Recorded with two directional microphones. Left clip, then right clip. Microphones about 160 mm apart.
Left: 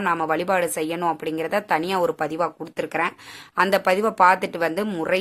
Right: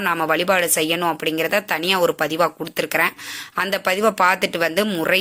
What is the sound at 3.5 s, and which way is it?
Speech, 5° right (ahead or behind).